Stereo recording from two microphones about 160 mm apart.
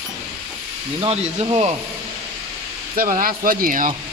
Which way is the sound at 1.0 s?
40° right (ahead or behind).